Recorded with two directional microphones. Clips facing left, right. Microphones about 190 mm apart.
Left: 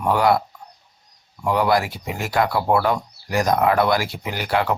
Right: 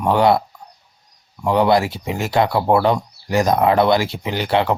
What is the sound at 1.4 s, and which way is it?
Speech, 25° right (ahead or behind).